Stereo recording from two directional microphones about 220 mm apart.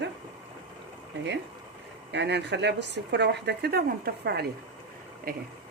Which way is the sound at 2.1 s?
50° right (ahead or behind).